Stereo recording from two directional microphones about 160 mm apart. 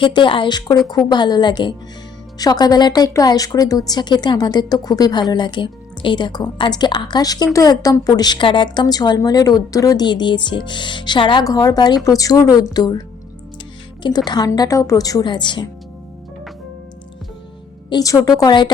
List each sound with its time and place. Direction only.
0.0 s speech: 30° left (ahead or behind)
14.3 s speech: 25° left (ahead or behind)
17.8 s speech: 25° left (ahead or behind)